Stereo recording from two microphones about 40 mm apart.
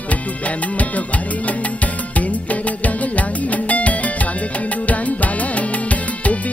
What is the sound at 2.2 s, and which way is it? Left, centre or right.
Music, left.